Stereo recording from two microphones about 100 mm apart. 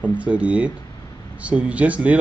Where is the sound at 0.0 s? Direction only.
15° right (ahead or behind).